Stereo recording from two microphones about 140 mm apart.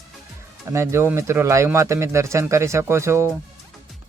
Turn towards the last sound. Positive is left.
turn(degrees=-20)  # may be behind; listen again after turning